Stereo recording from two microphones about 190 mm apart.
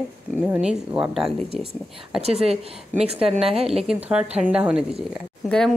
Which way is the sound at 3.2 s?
30° right (ahead or behind).